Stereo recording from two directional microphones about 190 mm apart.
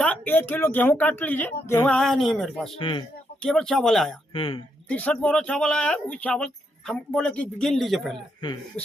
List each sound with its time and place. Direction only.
0.0 s speech: 10° left (ahead or behind)
2.7 s speech: 25° left (ahead or behind)
3.4 s speech: 5° left (ahead or behind)
4.4 s speech: 25° left (ahead or behind)
4.9 s speech: 5° left (ahead or behind)
8.4 s speech: 25° left (ahead or behind)